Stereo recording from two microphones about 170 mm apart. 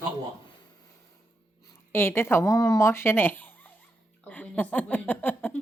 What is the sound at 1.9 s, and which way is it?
Speech, 15° left (ahead or behind).